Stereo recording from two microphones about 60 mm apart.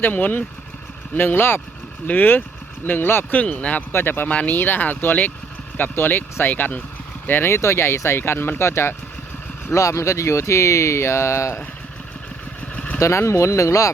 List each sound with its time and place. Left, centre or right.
0.0 s speech: left
3.3 s speech: left
3.9 s speech: left
4.3 s speech: left
4.5 s speech: left
7.3 s speech: left
9.7 s speech: left
12.7 s vehicle: left
13.0 s speech: left